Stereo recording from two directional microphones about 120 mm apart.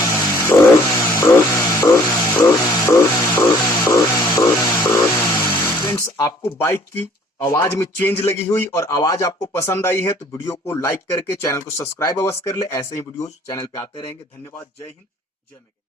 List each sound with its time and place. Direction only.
0.0 s a sound: 30° left (ahead or behind)
11.4 s speech: 25° left (ahead or behind)
13.7 s speech: 50° left (ahead or behind)